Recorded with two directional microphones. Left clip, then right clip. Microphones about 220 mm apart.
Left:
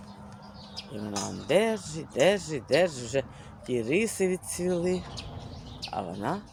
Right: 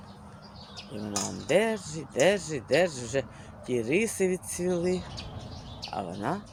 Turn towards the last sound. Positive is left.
turn(degrees=5)  # may be behind; listen again after turning